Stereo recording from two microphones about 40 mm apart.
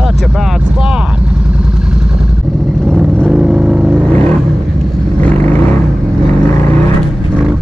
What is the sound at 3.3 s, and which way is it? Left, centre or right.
Vehicle, centre.